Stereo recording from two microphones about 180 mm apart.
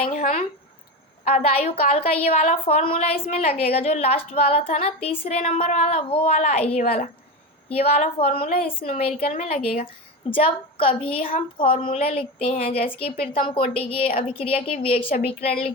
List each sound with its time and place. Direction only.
0.1 s a woman's voice: 40° left (ahead or behind)
7.9 s a woman's voice: 35° left (ahead or behind)
11.2 s a woman's voice: 50° left (ahead or behind)
11.5 s a woman's voice: 30° left (ahead or behind)